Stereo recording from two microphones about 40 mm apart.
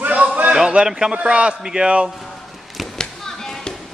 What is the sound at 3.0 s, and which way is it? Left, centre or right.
Chop, centre.